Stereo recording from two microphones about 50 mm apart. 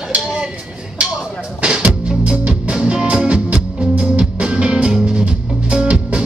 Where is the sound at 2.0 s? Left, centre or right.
Right.